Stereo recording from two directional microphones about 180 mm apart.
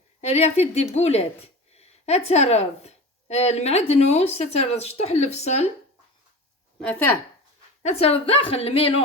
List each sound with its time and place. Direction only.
0.2 s a woman's voice: 35° left (ahead or behind)
6.7 s speech: 5° left (ahead or behind)
7.8 s a woman's voice: 35° left (ahead or behind)